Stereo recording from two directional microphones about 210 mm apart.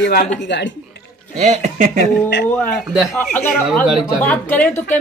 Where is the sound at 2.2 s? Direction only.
55° left (ahead or behind).